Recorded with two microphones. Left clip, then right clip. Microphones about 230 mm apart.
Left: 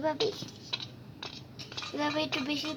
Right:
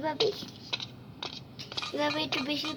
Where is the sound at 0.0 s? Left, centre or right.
Centre.